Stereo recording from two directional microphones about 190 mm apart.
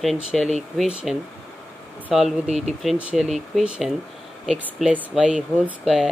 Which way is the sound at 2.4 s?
35° right (ahead or behind).